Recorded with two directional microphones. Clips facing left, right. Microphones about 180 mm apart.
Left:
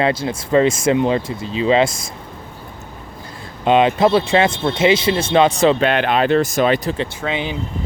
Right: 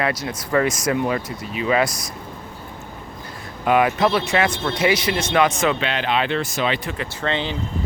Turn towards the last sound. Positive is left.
turn(degrees=10)  # may be behind; listen again after turning